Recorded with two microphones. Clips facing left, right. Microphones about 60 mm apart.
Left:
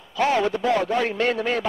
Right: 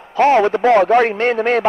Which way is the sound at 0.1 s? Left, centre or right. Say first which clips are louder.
Right 8 dB; right.